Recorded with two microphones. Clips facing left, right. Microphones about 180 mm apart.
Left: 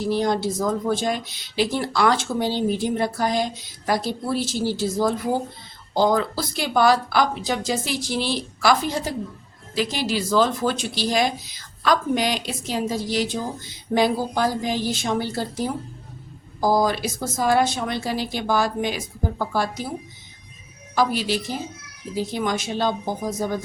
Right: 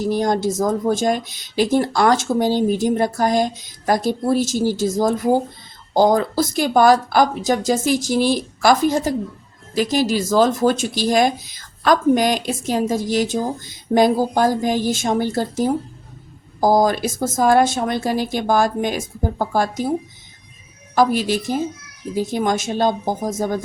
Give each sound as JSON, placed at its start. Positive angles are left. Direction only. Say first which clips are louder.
{"t": 0.0, "sound": "speech", "louder": "right 3 dB", "side_deg": -45}
{"t": 20.9, "sound": "speech", "louder": "right 5 dB", "side_deg": -45}